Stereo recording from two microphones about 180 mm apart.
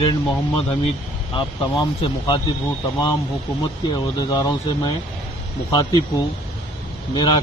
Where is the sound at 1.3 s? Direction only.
25° left (ahead or behind).